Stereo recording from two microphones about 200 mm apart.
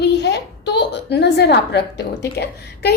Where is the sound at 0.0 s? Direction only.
60° left (ahead or behind).